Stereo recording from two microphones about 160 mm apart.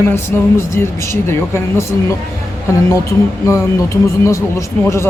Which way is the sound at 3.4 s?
20° left (ahead or behind).